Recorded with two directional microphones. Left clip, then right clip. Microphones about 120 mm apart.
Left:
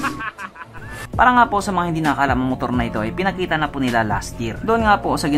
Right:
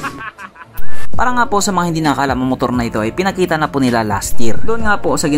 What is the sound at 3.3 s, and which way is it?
Speech, 60° right (ahead or behind).